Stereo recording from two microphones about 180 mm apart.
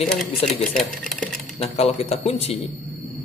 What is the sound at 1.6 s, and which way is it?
Speech, 35° left (ahead or behind).